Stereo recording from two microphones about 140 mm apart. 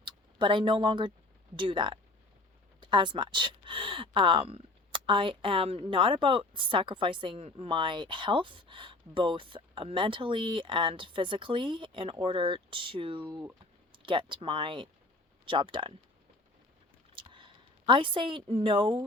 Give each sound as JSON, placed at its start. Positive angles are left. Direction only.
{"t": 0.0, "sound": "speech", "side_deg": -35}
{"t": 17.2, "sound": "a woman's voice", "side_deg": -35}